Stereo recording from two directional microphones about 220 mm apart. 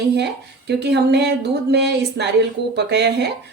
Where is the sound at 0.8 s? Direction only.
50° right (ahead or behind).